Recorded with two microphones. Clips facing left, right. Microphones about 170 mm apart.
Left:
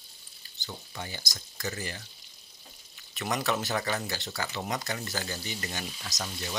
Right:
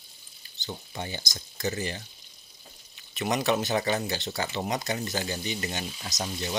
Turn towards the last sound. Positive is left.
turn(degrees=-25)  # may be behind; listen again after turning